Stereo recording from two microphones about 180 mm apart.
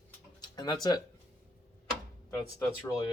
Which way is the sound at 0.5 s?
25° left (ahead or behind).